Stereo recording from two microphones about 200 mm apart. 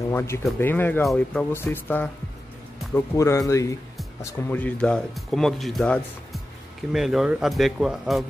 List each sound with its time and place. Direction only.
0.1 s speech: 15° left (ahead or behind); by 8.3 s centre (ahead or behind)